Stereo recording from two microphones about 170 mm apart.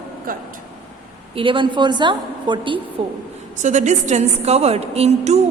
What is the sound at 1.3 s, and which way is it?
A woman's voice, 30° right (ahead or behind).